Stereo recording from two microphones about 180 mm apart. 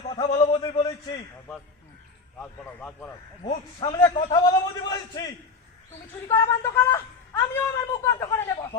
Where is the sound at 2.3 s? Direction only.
5° left (ahead or behind).